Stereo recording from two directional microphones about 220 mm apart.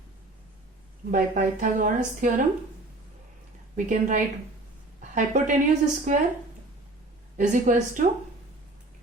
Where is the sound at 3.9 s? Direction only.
35° right (ahead or behind).